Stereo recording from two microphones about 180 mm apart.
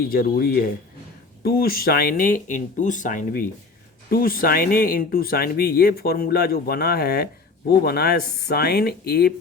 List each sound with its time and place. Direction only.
0.1 s speech: 55° left (ahead or behind)